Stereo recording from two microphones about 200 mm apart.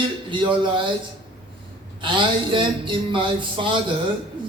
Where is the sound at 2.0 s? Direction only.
25° right (ahead or behind).